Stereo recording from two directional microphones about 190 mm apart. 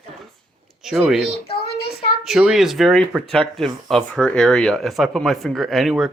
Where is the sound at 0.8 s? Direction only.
5° right (ahead or behind).